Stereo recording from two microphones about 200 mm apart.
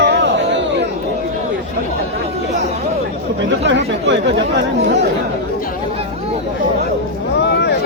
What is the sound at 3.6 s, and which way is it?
Speech, 65° right (ahead or behind).